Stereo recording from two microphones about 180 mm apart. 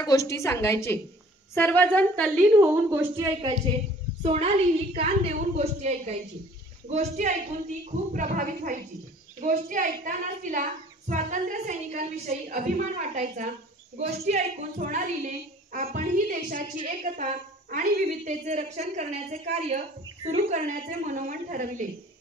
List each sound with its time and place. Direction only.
0.0 s a woman's voice: 15° left (ahead or behind)
2.6 s a woman's voice: 10° right (ahead or behind)
3.4 s a child's voice: 30° right (ahead or behind)
5.6 s a woman's voice: 40° right (ahead or behind)